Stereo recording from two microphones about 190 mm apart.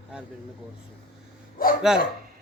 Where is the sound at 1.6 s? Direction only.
50° left (ahead or behind).